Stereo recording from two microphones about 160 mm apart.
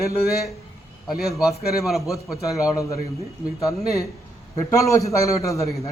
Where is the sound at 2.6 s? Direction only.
20° left (ahead or behind).